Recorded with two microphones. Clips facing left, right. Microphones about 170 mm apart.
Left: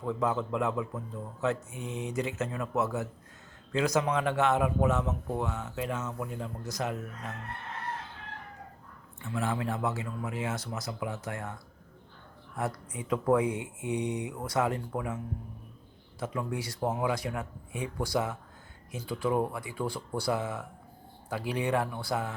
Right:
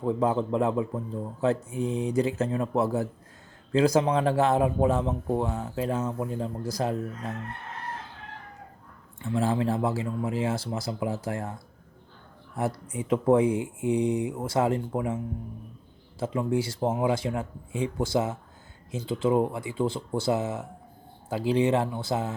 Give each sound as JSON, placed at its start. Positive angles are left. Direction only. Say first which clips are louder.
{"t": 0.0, "sound": "speech", "louder": "right 5 dB", "side_deg": -30}
{"t": 9.2, "sound": "speech", "louder": "right 6 dB", "side_deg": -30}
{"t": 12.5, "sound": "speech", "louder": "right 5 dB", "side_deg": -25}
{"t": 16.2, "sound": "speech", "louder": "right 7 dB", "side_deg": -25}